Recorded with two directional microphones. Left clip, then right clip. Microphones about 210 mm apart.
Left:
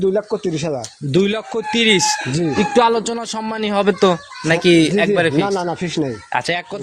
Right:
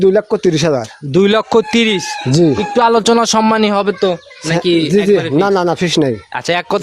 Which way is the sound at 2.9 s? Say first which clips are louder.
Right 9 dB; 45° right (ahead or behind).